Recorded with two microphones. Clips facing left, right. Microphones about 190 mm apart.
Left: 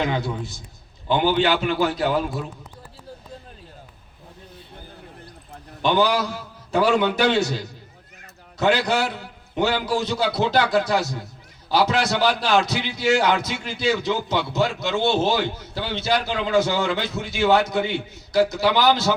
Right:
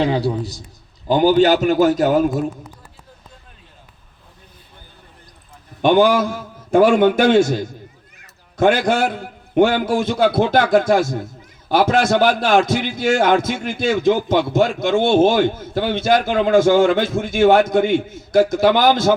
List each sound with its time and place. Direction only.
0.0 s a man's voice: 35° right (ahead or behind)
5.8 s a man's voice: 50° right (ahead or behind)